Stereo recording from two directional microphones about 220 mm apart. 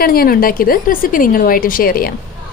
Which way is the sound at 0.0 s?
40° left (ahead or behind).